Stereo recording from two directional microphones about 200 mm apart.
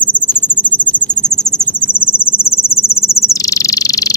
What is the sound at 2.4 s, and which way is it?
Cricket, 30° left (ahead or behind).